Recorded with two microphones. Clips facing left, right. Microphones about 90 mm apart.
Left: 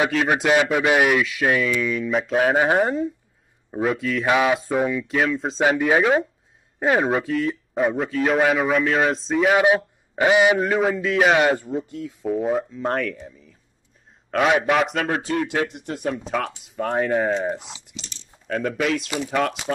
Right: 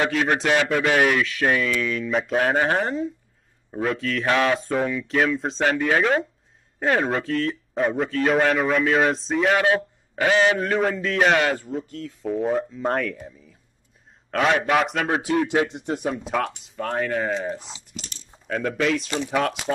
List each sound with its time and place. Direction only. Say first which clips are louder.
0.1 s a man's voice: left 2 dB; 5° left (ahead or behind)
9.6 s a man's voice: left 3 dB; 15° left (ahead or behind)
10.6 s a man's voice: left 2 dB; 5° left (ahead or behind)
11.3 s speech: left 3 dB; 20° left (ahead or behind)
12.2 s a man's voice: left 1 dB; 5° left (ahead or behind)
14.3 s a man's voice: left 1 dB; centre (ahead or behind)
15.0 s speech: right 1 dB; 15° right (ahead or behind)
15.4 s speech: right 2 dB; 25° right (ahead or behind)
16.3 s a man's voice: right 1 dB; centre (ahead or behind)